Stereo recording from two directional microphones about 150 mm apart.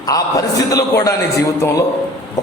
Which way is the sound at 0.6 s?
25° left (ahead or behind).